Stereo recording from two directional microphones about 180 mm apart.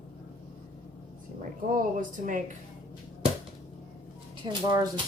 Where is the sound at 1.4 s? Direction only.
45° right (ahead or behind).